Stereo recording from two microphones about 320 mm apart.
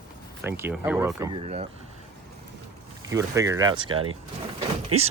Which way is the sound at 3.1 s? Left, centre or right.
Centre.